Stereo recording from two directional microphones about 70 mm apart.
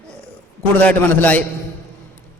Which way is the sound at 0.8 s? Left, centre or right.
Left.